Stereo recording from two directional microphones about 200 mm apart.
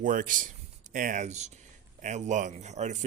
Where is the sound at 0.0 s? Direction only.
40° right (ahead or behind).